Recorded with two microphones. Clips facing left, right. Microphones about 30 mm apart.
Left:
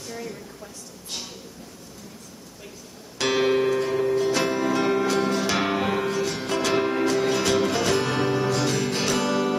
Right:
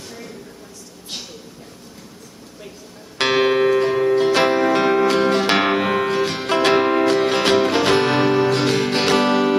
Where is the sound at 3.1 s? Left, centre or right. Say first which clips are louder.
Right 5 dB; right.